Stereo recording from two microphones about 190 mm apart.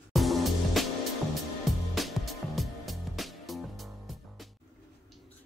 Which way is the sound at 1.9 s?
Centre (ahead or behind).